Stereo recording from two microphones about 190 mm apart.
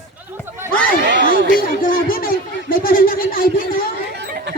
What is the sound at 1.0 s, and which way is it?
Chatter, 70° right (ahead or behind).